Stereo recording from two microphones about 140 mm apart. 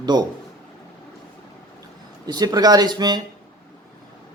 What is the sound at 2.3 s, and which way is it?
Speech, 30° right (ahead or behind).